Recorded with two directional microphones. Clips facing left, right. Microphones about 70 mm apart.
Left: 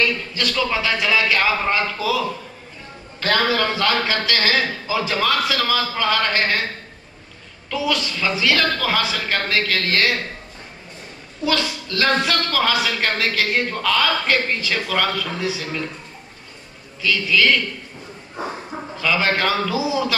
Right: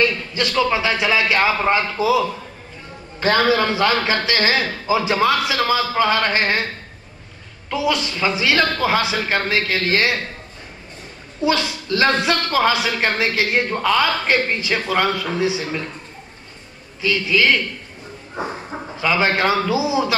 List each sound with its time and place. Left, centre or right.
0.0 s a woman's voice: right
7.7 s a woman's voice: right
11.4 s a woman's voice: right
17.0 s a woman's voice: right
18.9 s a woman's voice: right